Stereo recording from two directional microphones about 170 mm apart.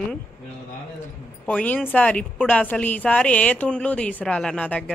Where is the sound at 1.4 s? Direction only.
10° left (ahead or behind).